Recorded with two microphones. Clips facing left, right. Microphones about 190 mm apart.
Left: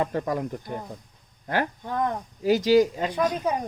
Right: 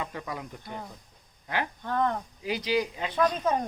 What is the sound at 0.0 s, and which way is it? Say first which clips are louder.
Speech: left 10 dB; 45° left (ahead or behind).